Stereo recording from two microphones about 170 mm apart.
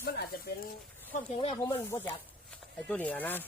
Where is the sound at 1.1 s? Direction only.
50° left (ahead or behind).